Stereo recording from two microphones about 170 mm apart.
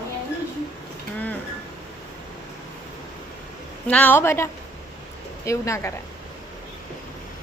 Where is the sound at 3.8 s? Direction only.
10° left (ahead or behind).